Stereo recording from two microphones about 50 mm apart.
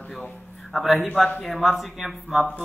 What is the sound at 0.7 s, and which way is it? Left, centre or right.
A man's voice, centre.